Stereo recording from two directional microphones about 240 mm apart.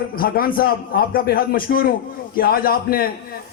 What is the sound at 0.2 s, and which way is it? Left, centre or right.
A man's voice, left.